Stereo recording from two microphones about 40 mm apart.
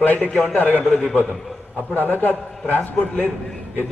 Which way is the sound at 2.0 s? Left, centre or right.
Left.